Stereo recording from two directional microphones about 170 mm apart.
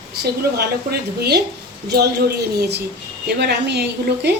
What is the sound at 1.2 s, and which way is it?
Speech, 80° right.